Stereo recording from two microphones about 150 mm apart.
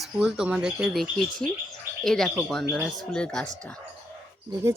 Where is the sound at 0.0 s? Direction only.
5° right (ahead or behind).